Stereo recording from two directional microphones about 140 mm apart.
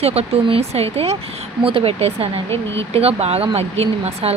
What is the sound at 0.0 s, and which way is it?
Speech, 45° right (ahead or behind).